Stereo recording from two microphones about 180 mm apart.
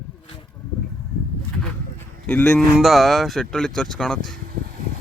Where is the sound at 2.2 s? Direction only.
5° left (ahead or behind).